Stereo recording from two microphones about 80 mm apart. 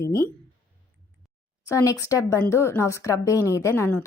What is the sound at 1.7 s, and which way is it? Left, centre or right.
A woman's voice, left.